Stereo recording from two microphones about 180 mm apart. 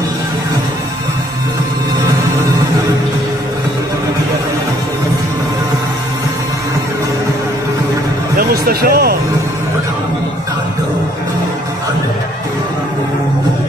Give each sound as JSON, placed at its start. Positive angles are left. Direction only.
{"t": 8.4, "sound": "music", "side_deg": -55}